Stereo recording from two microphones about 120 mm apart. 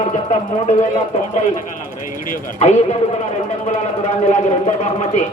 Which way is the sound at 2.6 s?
70° left (ahead or behind).